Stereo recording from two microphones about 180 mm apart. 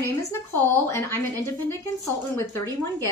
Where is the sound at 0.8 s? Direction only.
15° left (ahead or behind).